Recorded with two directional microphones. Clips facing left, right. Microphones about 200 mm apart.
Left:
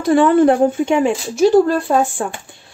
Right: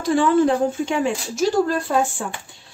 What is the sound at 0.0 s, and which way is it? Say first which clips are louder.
Speech: left 5 dB; 60° left (ahead or behind).